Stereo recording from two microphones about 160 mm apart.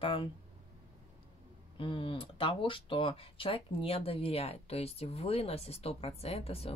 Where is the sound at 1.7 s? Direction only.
30° left (ahead or behind).